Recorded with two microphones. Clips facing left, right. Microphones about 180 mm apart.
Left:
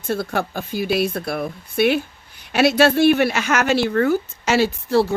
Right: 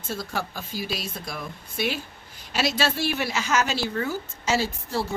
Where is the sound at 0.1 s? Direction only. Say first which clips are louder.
Left 8 dB; 60° left (ahead or behind).